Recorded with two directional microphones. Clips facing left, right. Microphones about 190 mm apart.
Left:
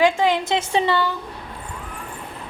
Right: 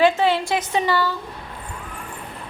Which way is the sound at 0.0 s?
15° left (ahead or behind).